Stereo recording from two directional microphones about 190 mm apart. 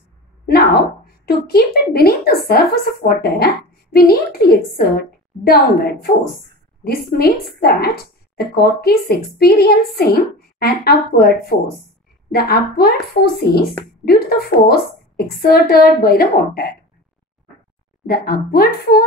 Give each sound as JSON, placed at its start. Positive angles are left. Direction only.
{"t": 0.5, "sound": "a woman's voice", "side_deg": 55}
{"t": 18.0, "sound": "a woman's voice", "side_deg": 50}